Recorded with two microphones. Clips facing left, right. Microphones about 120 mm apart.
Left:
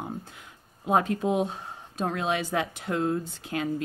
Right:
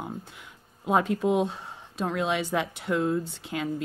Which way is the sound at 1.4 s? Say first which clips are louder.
Even; 45° left (ahead or behind).